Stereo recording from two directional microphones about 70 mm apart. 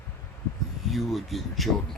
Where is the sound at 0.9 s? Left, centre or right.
Centre.